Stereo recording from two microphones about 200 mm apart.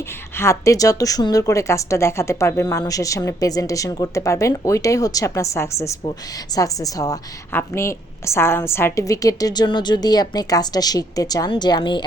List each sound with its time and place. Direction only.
0.3 s a woman's voice: 15° left (ahead or behind)